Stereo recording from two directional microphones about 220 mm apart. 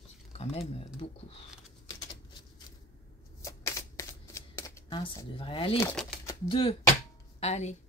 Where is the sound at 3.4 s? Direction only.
15° left (ahead or behind).